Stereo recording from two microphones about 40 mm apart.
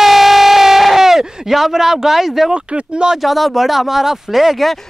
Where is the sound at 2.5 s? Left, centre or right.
Right.